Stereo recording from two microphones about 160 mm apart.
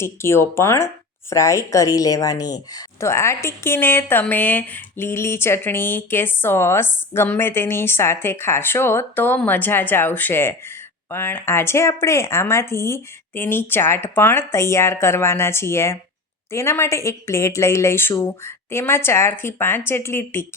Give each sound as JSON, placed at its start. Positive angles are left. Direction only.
{"t": 0.0, "sound": "speech", "side_deg": 15}